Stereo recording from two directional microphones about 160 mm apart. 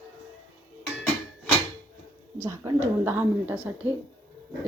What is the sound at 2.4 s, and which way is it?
A woman's voice, 20° right (ahead or behind).